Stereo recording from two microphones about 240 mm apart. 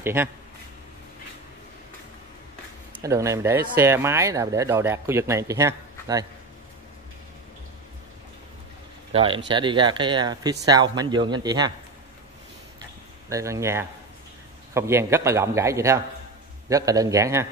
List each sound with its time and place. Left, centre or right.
0.0 s speech: centre
2.9 s speech: centre
9.1 s speech: right
13.3 s speech: centre